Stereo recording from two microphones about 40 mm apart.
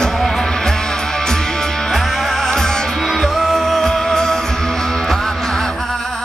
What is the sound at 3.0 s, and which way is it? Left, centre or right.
Music, centre.